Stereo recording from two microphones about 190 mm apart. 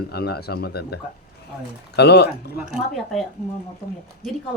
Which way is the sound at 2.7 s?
Centre (ahead or behind).